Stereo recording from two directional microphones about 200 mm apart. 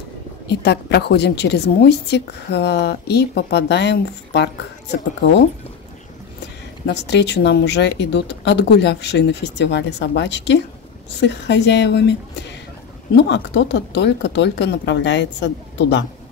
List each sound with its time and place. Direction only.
0.5 s a woman's voice: 55° left (ahead or behind)
6.9 s a woman's voice: 60° left (ahead or behind)